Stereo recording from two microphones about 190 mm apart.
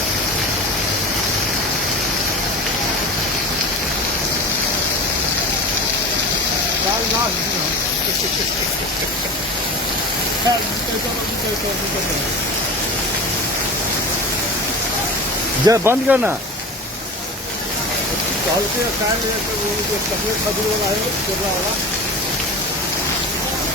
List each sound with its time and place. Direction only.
15.6 s speech: 15° right (ahead or behind)